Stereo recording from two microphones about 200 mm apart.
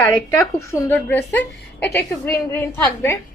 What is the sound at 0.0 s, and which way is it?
A woman's voice, 10° left (ahead or behind).